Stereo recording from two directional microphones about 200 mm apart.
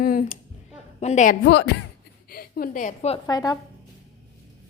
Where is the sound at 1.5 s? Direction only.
55° left (ahead or behind); by 3.2 s 35° left (ahead or behind).